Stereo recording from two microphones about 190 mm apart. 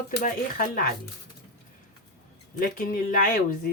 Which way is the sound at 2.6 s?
50° left (ahead or behind).